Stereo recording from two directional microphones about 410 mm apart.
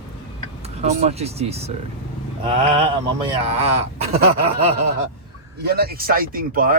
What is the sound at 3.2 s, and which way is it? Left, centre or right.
Speech, centre.